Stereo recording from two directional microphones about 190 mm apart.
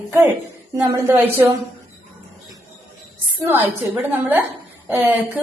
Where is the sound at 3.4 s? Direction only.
10° right (ahead or behind).